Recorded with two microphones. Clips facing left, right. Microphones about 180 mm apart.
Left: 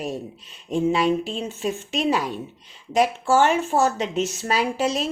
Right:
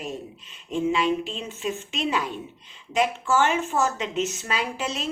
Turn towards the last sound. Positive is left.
turn(degrees=40)  # may be behind; listen again after turning